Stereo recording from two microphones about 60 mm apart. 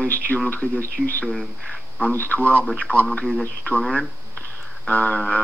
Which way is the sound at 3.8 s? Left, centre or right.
Centre.